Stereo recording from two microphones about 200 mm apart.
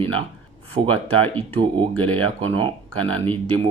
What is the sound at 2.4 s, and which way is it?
Speech, 25° right (ahead or behind).